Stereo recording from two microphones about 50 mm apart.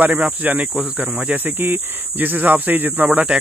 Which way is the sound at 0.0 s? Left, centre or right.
Right.